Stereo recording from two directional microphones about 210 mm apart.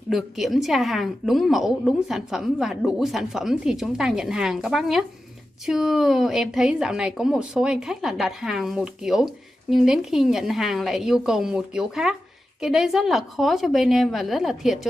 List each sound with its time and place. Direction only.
0.1 s a woman's voice: centre (ahead or behind)